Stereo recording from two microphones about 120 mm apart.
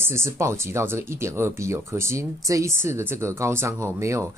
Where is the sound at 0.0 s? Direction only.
20° right (ahead or behind).